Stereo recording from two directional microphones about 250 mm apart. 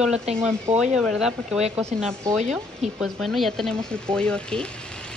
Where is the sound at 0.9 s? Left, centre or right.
Centre.